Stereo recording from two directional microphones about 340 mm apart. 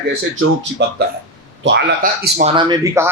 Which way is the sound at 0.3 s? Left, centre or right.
Right.